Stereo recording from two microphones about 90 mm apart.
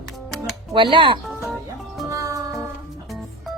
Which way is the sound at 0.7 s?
70° right (ahead or behind).